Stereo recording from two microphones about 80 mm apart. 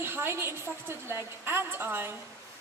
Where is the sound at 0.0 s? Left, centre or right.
Right.